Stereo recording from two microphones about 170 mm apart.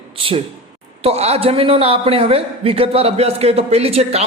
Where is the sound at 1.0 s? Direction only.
35° right (ahead or behind).